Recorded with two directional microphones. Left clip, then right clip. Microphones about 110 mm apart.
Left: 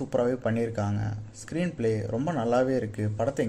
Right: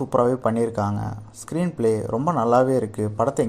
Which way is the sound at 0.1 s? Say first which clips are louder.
Right 6 dB; 25° right (ahead or behind).